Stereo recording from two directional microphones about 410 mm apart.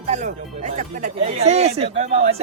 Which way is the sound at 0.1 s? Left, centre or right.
Centre.